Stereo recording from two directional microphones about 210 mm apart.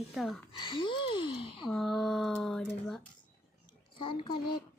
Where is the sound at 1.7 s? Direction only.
Centre (ahead or behind).